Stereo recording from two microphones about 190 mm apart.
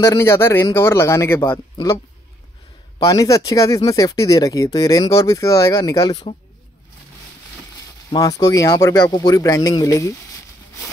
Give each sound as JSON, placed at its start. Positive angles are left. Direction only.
{"t": 0.0, "sound": "speech", "side_deg": 15}
{"t": 3.0, "sound": "speech", "side_deg": 20}
{"t": 8.1, "sound": "speech", "side_deg": 20}